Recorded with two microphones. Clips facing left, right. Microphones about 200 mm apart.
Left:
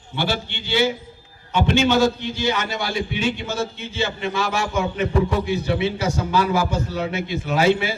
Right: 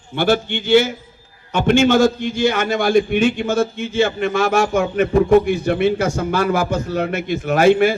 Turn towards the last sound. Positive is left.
turn(degrees=-50)  # may be behind; listen again after turning